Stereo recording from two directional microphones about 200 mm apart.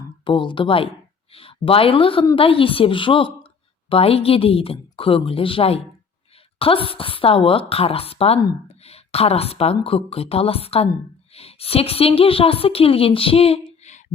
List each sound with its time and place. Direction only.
0.3 s a woman's voice: 25° left (ahead or behind)